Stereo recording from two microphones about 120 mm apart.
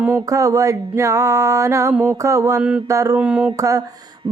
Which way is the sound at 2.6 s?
10° right (ahead or behind).